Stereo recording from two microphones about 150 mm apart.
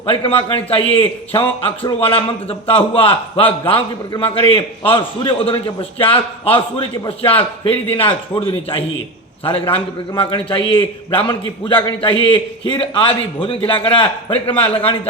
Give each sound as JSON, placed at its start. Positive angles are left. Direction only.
{"t": 0.0, "sound": "a man's voice", "side_deg": 35}